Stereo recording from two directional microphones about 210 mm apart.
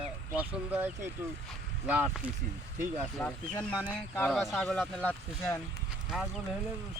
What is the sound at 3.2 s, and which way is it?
Speech, 5° left (ahead or behind).